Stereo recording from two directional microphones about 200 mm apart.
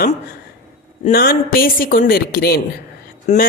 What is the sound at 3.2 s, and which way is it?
Speech, 35° left (ahead or behind).